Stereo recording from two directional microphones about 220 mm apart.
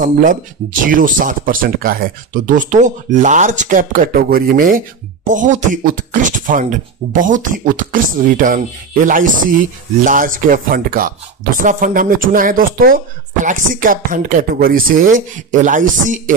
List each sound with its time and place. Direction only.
0.0 s speech: 35° right (ahead or behind)